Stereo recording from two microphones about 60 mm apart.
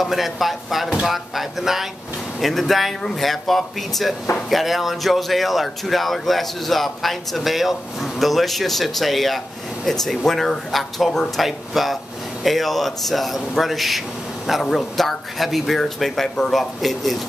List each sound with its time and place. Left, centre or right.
0.0 s speech: centre